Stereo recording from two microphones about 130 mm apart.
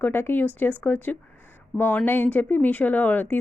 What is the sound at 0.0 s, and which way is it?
Speech, 15° left (ahead or behind).